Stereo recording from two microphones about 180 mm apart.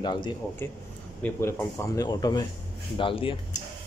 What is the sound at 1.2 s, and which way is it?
Speech, 15° left (ahead or behind).